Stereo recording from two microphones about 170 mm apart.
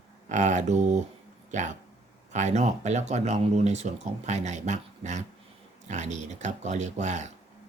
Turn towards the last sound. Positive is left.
turn(degrees=-45)  # may be behind; listen again after turning